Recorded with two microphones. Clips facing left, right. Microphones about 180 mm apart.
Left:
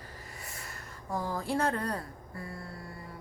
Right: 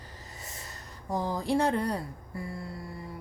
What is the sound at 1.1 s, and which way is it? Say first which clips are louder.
A woman's voice: right 4 dB; 20° right (ahead or behind).